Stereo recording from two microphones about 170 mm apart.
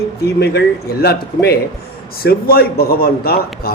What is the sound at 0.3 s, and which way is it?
A man's voice, 75° left (ahead or behind).